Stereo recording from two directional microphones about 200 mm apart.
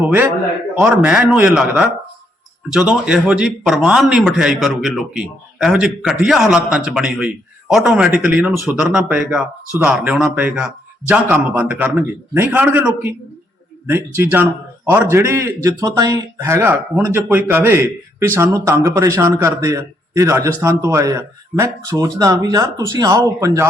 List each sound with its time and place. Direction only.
0.8 s a man's voice: 5° right (ahead or behind)